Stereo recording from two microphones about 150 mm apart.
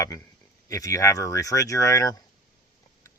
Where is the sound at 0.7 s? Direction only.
20° left (ahead or behind).